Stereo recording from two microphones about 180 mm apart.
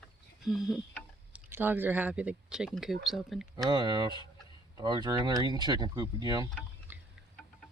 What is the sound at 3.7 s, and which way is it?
Speech, 25° right (ahead or behind).